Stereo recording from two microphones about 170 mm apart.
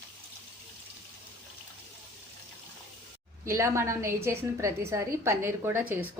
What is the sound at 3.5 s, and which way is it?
A woman's voice, 15° right (ahead or behind).